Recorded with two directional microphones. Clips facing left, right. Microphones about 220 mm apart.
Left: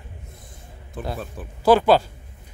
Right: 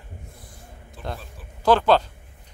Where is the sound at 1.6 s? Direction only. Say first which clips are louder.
Left 2 dB; 10° left (ahead or behind).